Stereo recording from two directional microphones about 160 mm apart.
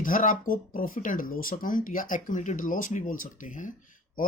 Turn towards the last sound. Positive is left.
turn(degrees=55)  # may be behind; listen again after turning